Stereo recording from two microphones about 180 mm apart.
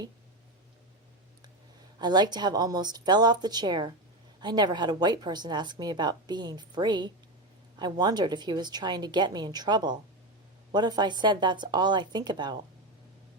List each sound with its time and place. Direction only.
2.0 s speech: 25° right (ahead or behind)